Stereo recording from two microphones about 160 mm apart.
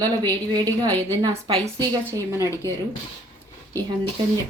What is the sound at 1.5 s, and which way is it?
Speech, 30° right (ahead or behind).